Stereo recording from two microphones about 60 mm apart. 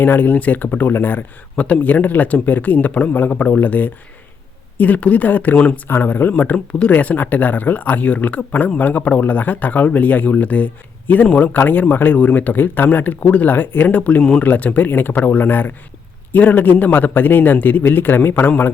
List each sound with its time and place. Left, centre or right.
0.0 s a man's voice: left
1.5 s speech: left
5.9 s speech: left
14.2 s speech: centre
14.4 s a man's voice: left